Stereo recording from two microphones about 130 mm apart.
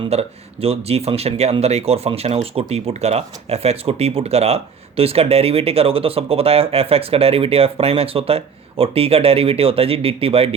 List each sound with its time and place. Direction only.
0.0 s speech: 50° right (ahead or behind)